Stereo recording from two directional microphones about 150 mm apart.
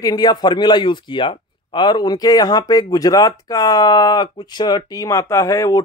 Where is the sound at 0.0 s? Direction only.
25° left (ahead or behind).